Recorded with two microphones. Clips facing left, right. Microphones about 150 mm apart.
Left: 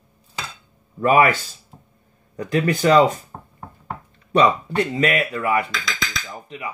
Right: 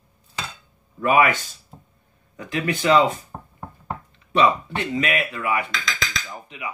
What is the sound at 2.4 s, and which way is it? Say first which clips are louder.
Speech: left 5 dB; 40° left (ahead or behind).